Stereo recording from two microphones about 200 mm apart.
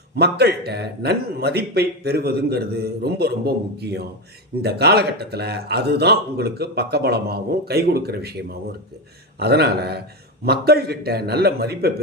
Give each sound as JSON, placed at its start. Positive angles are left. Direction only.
{"t": 0.2, "sound": "a man's voice", "side_deg": -55}